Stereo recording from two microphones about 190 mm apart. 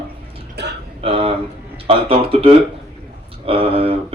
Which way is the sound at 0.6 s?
60° right (ahead or behind).